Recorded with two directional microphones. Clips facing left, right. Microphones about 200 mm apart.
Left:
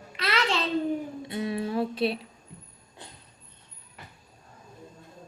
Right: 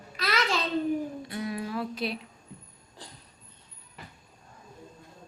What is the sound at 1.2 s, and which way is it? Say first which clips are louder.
Speech: left 3 dB; 25° left (ahead or behind).